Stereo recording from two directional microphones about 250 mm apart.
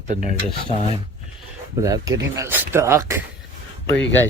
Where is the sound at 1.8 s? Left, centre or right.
Centre.